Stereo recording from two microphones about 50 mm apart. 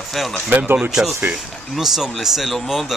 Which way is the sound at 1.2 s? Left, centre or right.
Centre.